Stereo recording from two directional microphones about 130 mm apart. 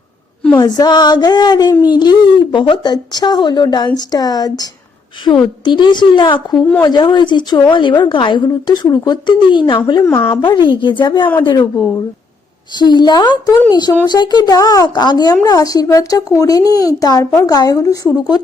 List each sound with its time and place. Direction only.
0.6 s a woman's voice: 30° left (ahead or behind)
6.6 s speech: 10° left (ahead or behind)
6.8 s a woman's voice: 35° left (ahead or behind)
10.0 s speech: 20° left (ahead or behind)
10.4 s a woman's voice: 40° left (ahead or behind)
12.8 s a woman's voice: 35° left (ahead or behind)